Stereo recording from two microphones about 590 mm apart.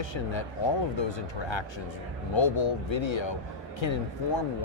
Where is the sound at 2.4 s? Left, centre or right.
Left.